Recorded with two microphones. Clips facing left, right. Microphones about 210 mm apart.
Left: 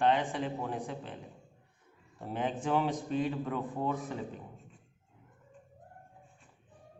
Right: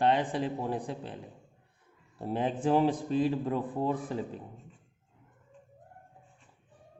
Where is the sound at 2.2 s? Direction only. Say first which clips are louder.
Right 4 dB; 35° right (ahead or behind).